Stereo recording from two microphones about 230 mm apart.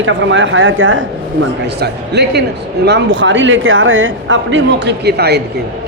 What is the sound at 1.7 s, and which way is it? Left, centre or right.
Speech, right.